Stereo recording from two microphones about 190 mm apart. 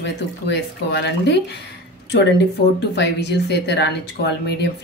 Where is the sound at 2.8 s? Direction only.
60° left (ahead or behind).